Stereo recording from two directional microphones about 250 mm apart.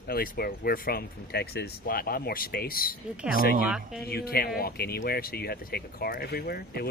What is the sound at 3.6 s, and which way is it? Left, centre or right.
Speech, centre.